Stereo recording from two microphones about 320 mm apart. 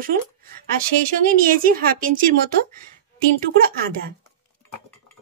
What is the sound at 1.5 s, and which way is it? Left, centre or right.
Speech, right.